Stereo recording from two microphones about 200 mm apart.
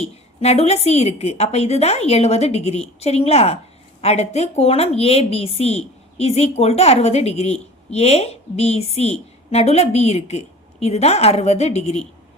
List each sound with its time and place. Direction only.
0.0 s a woman's voice: 30° left (ahead or behind)